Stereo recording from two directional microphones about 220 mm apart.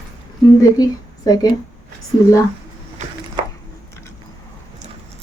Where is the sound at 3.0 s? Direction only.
30° right (ahead or behind).